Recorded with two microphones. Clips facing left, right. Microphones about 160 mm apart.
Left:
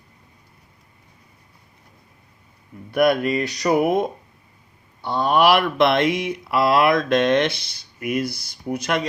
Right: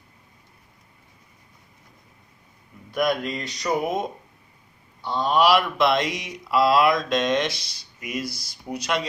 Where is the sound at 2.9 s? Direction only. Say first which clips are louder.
Left 6 dB; 65° left (ahead or behind).